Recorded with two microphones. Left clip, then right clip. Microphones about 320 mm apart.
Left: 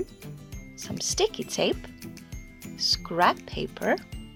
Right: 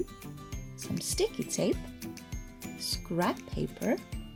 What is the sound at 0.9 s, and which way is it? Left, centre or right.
Speech, centre.